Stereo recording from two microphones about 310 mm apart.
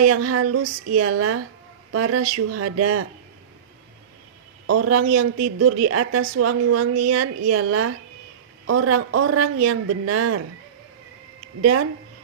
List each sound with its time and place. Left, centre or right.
0.0 s speech: right
4.6 s a man's voice: right
11.6 s speech: right